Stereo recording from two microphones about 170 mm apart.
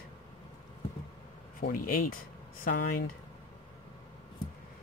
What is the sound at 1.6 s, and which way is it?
Speech, 60° left (ahead or behind).